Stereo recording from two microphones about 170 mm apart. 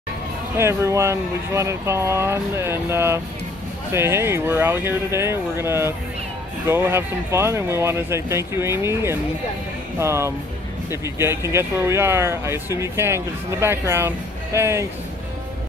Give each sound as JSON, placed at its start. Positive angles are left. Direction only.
{"t": 0.6, "sound": "speech", "side_deg": -15}